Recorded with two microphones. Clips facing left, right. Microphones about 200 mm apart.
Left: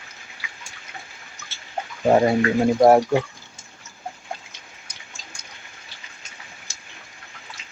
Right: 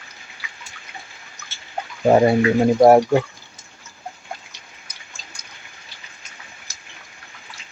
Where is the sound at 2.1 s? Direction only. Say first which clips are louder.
Right 3 dB; 10° right (ahead or behind).